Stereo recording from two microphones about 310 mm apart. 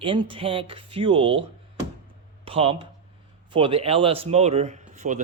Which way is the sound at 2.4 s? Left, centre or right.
Centre.